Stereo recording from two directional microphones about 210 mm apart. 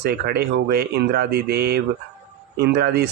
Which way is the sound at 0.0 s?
50° right (ahead or behind).